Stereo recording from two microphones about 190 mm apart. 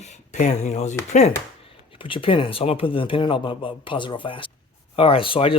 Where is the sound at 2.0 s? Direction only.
25° left (ahead or behind).